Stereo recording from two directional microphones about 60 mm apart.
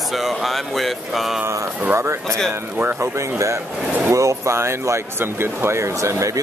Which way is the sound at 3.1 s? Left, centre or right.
Right.